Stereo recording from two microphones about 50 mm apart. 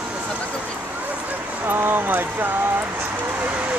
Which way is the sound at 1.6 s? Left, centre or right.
Right.